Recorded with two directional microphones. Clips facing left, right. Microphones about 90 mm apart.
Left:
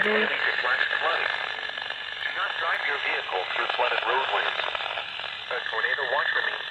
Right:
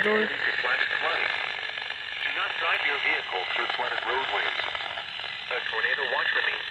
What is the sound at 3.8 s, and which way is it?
Speech, 60° left (ahead or behind).